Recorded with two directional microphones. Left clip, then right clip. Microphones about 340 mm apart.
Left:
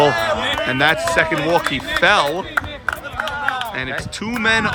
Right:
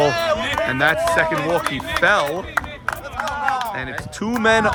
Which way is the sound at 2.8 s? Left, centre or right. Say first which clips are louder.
Left 1 dB; right.